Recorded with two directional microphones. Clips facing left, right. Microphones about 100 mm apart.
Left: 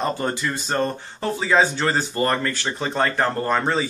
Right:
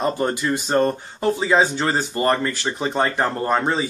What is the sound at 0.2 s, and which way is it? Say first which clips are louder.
Speech: right 3 dB; 15° right (ahead or behind).